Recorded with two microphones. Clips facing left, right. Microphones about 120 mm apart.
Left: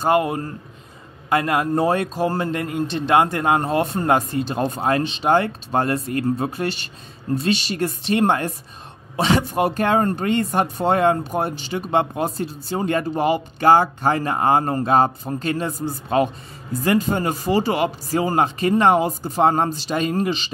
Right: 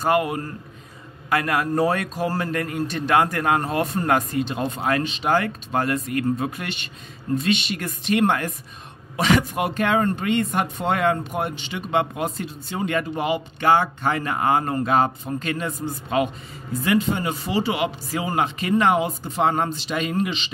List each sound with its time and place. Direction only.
0.0 s a man's voice: 25° left (ahead or behind)